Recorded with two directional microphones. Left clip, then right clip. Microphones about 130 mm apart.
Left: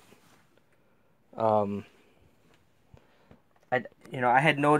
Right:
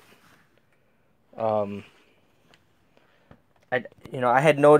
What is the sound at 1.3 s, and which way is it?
Speech, 30° left (ahead or behind).